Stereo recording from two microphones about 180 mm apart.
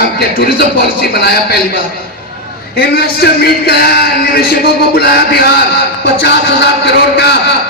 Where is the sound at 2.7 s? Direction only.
55° left (ahead or behind).